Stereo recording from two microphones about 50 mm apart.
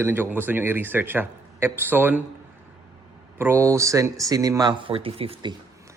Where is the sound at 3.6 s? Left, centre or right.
Right.